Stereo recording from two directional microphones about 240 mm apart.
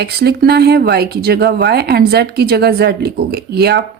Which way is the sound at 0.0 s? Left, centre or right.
Right.